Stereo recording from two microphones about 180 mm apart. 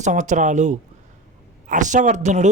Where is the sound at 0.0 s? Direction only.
40° right (ahead or behind).